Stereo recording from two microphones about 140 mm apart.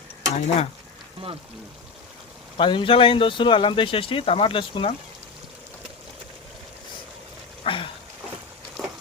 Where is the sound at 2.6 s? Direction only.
35° left (ahead or behind).